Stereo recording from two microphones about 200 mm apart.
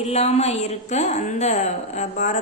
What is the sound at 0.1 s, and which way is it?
Speech, 30° left (ahead or behind).